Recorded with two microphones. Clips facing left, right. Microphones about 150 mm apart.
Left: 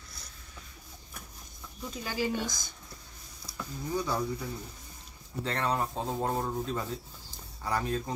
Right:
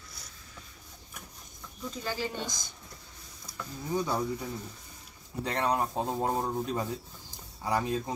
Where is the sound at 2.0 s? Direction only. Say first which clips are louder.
Left 3 dB; 10° left (ahead or behind).